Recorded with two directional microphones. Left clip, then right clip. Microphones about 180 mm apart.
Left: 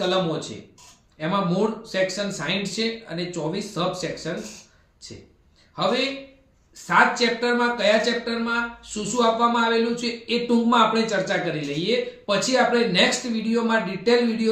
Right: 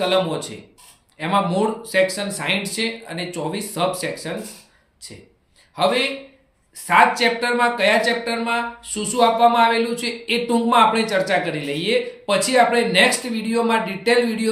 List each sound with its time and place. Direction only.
0.0 s speech: 15° right (ahead or behind)
5.0 s speech: 15° right (ahead or behind)
7.2 s speech: 15° right (ahead or behind)